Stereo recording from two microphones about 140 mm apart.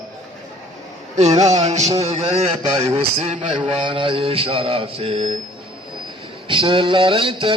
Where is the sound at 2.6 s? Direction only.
40° right (ahead or behind).